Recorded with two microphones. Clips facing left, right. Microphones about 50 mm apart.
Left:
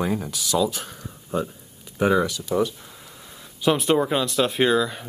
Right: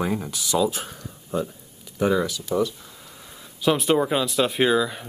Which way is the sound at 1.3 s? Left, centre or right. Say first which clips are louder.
Even; centre.